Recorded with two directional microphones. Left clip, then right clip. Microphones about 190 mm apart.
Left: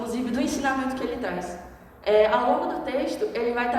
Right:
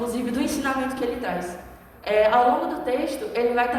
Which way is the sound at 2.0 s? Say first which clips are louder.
Right 2 dB; 45° left (ahead or behind).